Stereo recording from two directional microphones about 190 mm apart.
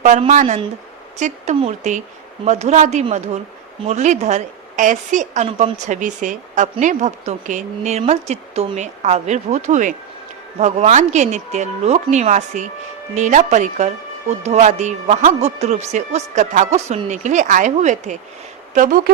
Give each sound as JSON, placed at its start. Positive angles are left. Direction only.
{"t": 0.0, "sound": "a woman's voice", "side_deg": -40}